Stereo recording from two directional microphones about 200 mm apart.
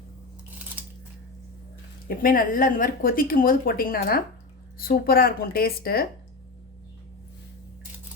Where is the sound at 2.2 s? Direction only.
45° left (ahead or behind).